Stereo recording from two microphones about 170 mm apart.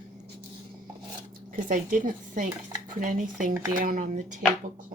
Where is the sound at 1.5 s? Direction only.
50° right (ahead or behind).